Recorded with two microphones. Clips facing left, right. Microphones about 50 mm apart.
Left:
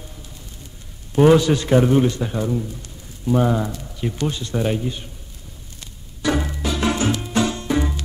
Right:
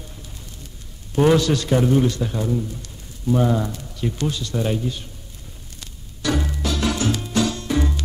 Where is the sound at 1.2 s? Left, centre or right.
Centre.